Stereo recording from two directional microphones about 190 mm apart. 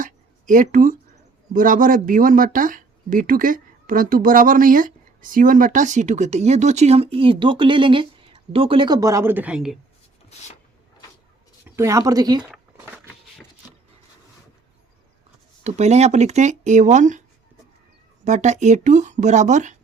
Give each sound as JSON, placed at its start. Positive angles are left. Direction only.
{"t": 0.0, "sound": "a sound", "side_deg": -45}
{"t": 1.5, "sound": "speech", "side_deg": -45}
{"t": 11.6, "sound": "speech", "side_deg": -15}
{"t": 12.4, "sound": "zipper", "side_deg": -10}
{"t": 15.6, "sound": "speech", "side_deg": -35}
{"t": 18.3, "sound": "speech", "side_deg": -40}